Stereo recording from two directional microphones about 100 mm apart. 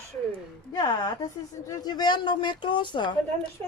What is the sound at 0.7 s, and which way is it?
A woman's voice, 40° left (ahead or behind).